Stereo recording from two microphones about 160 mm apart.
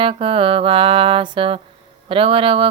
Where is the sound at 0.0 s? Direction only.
35° right (ahead or behind).